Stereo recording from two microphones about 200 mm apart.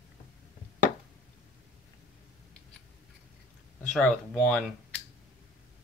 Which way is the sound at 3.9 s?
5° left (ahead or behind).